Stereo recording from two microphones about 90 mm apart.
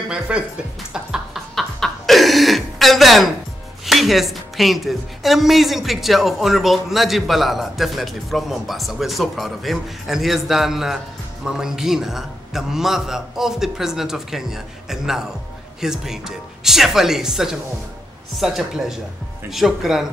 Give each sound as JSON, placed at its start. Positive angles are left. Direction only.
{"t": 0.1, "sound": "speech", "side_deg": -10}
{"t": 0.9, "sound": "a sound", "side_deg": -5}
{"t": 1.5, "sound": "chuckle", "side_deg": 0}
{"t": 3.8, "sound": "speech", "side_deg": 0}